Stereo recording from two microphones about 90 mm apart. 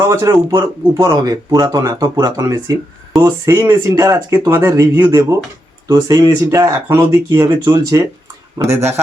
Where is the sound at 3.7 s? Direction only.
40° right (ahead or behind).